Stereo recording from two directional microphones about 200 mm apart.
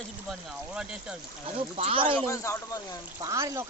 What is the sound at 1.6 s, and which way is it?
Speech, 30° right (ahead or behind).